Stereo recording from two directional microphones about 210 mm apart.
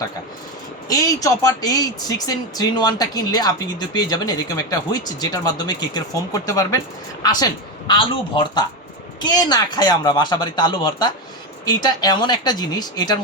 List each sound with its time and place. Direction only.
0.9 s speech: 15° left (ahead or behind)